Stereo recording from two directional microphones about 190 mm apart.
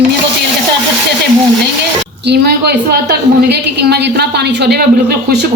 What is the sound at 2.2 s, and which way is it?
A woman's voice, 60° right (ahead or behind).